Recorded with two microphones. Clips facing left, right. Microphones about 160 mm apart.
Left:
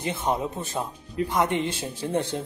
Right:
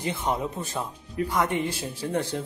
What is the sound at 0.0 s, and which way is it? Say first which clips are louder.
Speech: left 1 dB; 20° left (ahead or behind).